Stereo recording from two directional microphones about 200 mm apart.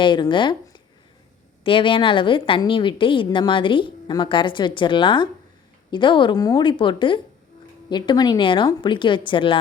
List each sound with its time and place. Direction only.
0.0 s a woman's voice: 25° left (ahead or behind)